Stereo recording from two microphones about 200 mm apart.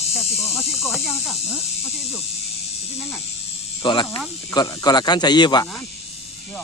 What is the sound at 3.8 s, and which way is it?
Speech, 25° left (ahead or behind).